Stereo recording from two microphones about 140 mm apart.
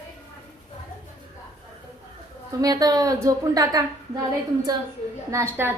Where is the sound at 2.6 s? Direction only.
25° right (ahead or behind).